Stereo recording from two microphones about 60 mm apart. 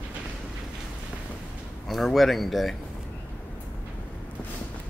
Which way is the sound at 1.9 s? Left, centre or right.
Centre.